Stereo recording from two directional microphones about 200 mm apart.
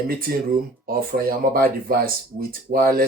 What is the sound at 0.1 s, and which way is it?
Speech, 45° right (ahead or behind).